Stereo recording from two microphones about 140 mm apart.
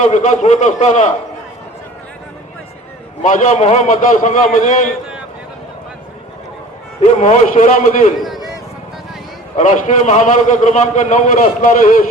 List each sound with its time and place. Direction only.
0.0 s a man's voice: 60° left (ahead or behind)
3.2 s a man's voice: 60° left (ahead or behind)
7.0 s a man's voice: 55° left (ahead or behind)
8.2 s a sound: centre (ahead or behind)
9.6 s a man's voice: 60° left (ahead or behind)